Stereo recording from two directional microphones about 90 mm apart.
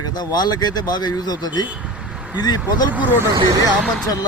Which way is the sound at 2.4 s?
50° left (ahead or behind).